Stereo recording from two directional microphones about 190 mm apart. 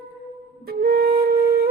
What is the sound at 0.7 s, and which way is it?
Flute, 55° right (ahead or behind).